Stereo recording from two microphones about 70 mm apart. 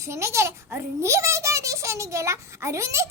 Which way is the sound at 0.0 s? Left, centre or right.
Right.